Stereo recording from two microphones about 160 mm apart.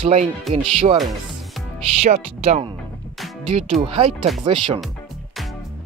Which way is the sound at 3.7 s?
35° right (ahead or behind).